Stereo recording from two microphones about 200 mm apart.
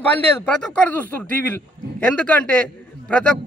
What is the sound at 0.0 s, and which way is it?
A man's voice, 5° left (ahead or behind).